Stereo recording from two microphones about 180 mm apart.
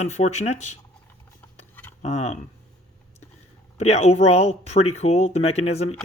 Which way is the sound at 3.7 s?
35° left (ahead or behind).